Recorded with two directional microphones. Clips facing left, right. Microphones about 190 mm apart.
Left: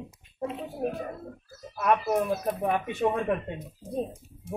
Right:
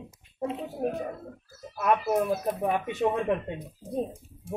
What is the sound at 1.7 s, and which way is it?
Speech, 5° right (ahead or behind).